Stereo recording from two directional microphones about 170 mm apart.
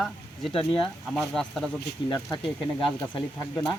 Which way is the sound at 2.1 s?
20° left (ahead or behind).